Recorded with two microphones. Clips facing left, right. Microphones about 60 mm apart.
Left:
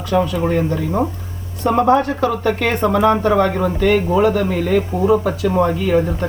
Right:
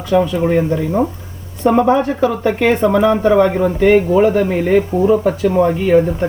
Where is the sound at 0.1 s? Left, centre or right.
Centre.